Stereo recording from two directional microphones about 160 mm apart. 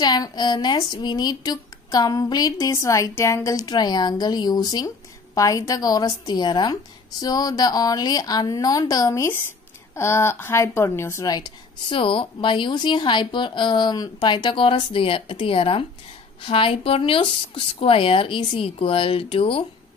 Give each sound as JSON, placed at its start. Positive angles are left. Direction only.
{"t": 0.0, "sound": "speech", "side_deg": 25}